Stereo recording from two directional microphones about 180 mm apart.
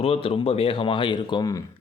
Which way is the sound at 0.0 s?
30° left (ahead or behind).